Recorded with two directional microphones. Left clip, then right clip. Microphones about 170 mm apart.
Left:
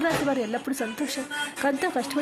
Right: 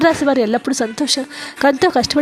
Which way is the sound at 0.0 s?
40° right (ahead or behind).